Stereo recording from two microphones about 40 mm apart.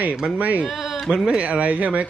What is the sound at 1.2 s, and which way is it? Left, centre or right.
Speech, right.